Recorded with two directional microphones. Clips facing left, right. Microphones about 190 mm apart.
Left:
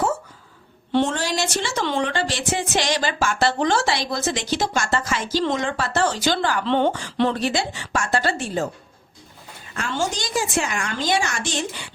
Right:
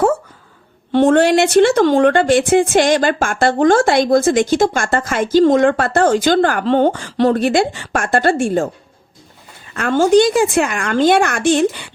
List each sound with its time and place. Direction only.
0.9 s a woman's voice: 55° right (ahead or behind)
9.7 s a woman's voice: 60° right (ahead or behind)